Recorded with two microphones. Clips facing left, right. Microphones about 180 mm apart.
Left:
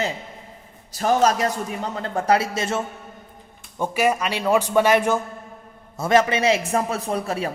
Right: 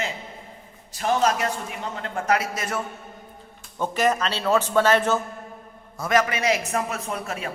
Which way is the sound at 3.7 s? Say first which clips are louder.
Left 1 dB; 10° left (ahead or behind).